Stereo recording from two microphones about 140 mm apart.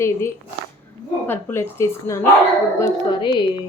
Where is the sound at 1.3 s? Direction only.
15° left (ahead or behind).